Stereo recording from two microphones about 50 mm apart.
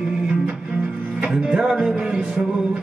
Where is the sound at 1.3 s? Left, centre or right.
Centre.